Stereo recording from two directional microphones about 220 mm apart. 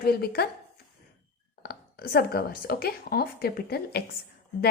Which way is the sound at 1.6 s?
45° left (ahead or behind).